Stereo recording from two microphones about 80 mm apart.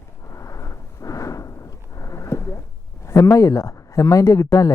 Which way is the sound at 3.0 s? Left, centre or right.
Left.